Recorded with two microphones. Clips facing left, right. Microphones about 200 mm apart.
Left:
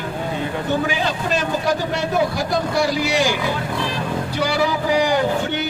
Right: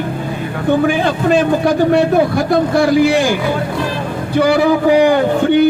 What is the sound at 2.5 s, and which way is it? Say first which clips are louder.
Speech: right 8 dB; 55° right (ahead or behind).